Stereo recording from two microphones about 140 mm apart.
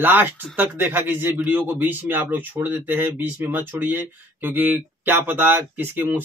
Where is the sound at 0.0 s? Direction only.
15° right (ahead or behind).